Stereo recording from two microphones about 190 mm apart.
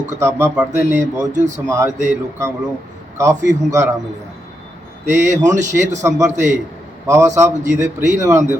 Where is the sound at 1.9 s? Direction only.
40° right (ahead or behind).